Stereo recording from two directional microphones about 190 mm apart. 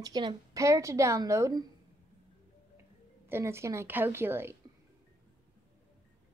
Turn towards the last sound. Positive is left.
turn(degrees=-10)  # may be behind; listen again after turning